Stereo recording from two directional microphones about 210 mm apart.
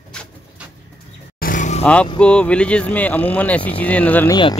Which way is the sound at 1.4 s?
40° left (ahead or behind).